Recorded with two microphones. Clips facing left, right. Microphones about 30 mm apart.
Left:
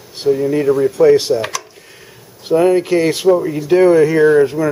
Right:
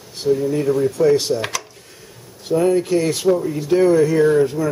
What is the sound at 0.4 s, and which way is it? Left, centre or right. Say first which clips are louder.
Speech: left 4 dB; left.